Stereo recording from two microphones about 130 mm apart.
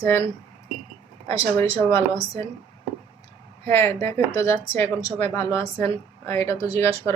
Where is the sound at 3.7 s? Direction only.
20° left (ahead or behind).